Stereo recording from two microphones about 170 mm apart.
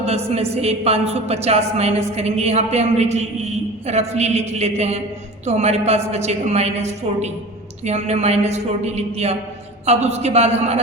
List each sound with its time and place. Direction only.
0.0 s a woman's voice: 35° right (ahead or behind)